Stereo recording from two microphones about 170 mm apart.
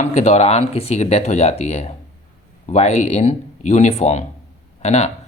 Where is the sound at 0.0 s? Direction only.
40° left (ahead or behind).